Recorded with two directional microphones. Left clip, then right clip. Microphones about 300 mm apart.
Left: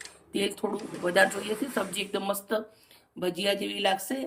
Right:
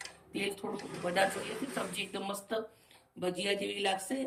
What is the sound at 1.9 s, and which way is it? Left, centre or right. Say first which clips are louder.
Speech: left 7 dB; centre.